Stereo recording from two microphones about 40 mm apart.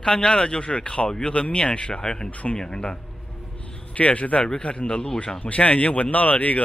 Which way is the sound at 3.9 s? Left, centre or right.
Left.